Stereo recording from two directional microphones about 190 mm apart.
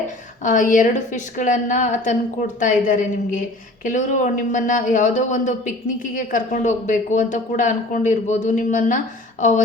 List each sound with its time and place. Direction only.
0.4 s a woman's voice: 45° left (ahead or behind)